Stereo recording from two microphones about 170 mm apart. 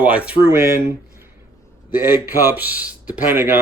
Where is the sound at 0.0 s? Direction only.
10° right (ahead or behind).